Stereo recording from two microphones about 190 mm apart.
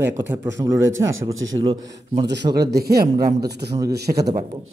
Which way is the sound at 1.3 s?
90° right.